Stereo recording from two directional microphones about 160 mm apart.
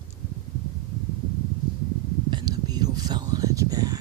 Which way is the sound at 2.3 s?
25° right (ahead or behind).